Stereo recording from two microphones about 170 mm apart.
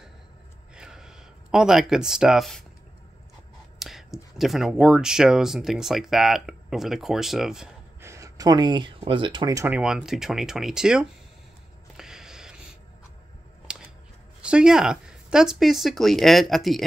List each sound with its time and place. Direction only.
0.7 s a sound: 5° right (ahead or behind)
3.8 s speech: centre (ahead or behind)
8.0 s speech: 15° right (ahead or behind)
9.7 s speech: 5° right (ahead or behind)
12.0 s a sound: 5° right (ahead or behind)
13.7 s scissors: 5° right (ahead or behind)
14.4 s speech: 5° right (ahead or behind)